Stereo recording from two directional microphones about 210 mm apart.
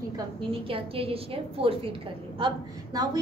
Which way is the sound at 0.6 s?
25° right (ahead or behind).